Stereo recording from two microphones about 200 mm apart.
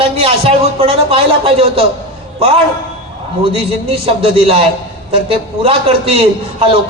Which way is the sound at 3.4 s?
30° right (ahead or behind).